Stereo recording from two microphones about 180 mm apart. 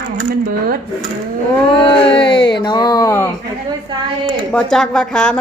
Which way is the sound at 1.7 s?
30° left (ahead or behind).